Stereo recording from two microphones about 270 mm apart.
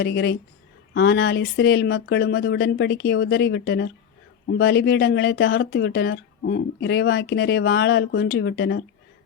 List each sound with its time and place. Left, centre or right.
0.0 s speech: left